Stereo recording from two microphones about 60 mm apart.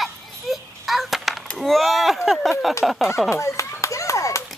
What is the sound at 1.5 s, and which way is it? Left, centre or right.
Speech, centre.